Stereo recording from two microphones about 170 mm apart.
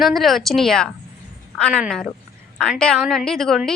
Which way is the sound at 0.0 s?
Centre (ahead or behind).